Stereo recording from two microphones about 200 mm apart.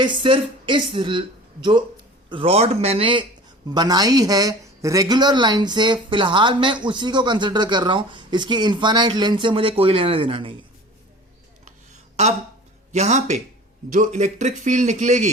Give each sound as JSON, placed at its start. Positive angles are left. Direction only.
{"t": 0.0, "sound": "speech", "side_deg": -25}
{"t": 2.3, "sound": "speech", "side_deg": -30}
{"t": 12.9, "sound": "a man's voice", "side_deg": -35}